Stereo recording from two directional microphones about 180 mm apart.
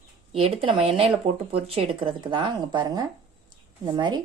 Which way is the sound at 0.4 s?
30° right (ahead or behind).